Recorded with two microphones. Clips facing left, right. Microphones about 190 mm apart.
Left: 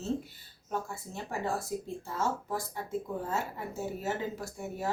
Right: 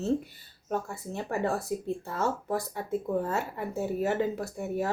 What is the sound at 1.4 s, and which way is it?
Speech, 60° right (ahead or behind).